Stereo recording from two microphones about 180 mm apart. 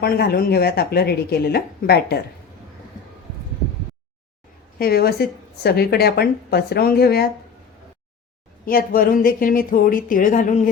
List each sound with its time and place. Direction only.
0.0 s a woman's voice: 60° left (ahead or behind)
4.8 s a woman's voice: 60° left (ahead or behind)
8.6 s speech: 55° left (ahead or behind)